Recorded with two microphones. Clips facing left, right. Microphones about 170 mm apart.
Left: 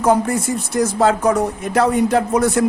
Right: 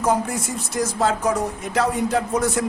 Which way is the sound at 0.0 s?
60° left (ahead or behind).